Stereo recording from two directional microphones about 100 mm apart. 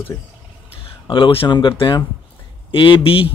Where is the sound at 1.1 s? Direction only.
60° left (ahead or behind).